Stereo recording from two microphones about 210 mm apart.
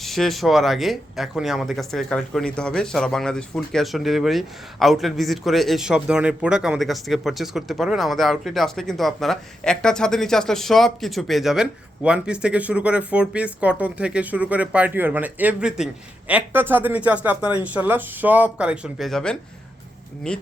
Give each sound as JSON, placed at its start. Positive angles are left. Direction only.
{"t": 0.0, "sound": "speech", "side_deg": 0}